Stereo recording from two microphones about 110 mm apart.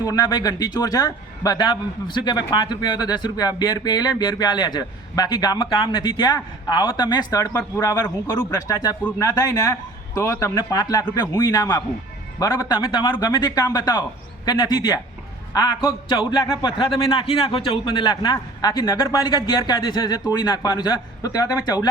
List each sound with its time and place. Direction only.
0.0 s a man's voice: 35° left (ahead or behind)
10.6 s a man's voice: 40° left (ahead or behind)